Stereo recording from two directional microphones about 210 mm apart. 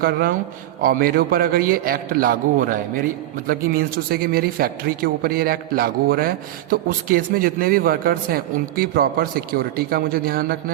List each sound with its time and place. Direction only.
0.0 s speech: 45° right (ahead or behind)